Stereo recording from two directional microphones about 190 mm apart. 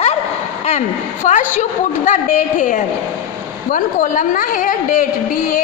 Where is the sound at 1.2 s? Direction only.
40° left (ahead or behind).